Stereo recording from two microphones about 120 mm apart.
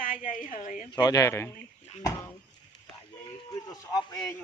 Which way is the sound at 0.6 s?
90° left.